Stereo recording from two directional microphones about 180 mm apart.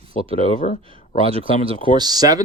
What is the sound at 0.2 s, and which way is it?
Speech, 30° right (ahead or behind).